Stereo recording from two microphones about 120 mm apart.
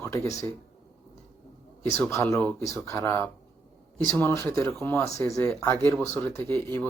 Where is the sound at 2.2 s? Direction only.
15° left (ahead or behind).